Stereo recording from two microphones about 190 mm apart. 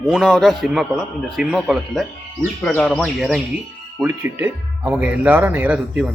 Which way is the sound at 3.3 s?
5° right (ahead or behind).